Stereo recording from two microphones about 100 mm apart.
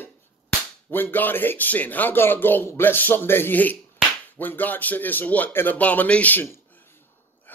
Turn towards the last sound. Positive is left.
turn(degrees=20)  # may be behind; listen again after turning